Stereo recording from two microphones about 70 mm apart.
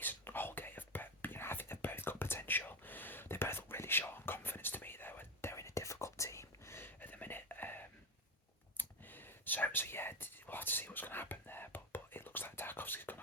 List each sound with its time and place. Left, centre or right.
0.0 s whispering: left